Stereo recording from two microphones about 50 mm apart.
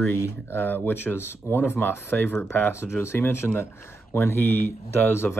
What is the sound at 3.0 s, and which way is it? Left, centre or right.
Speech, left.